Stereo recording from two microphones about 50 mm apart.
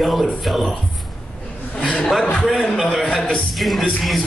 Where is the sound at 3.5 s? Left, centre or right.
Centre.